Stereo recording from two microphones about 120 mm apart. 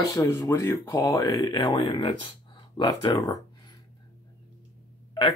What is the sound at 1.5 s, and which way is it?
Speech, 45° left (ahead or behind).